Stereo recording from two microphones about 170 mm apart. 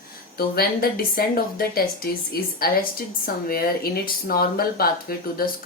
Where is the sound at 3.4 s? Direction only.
60° left (ahead or behind).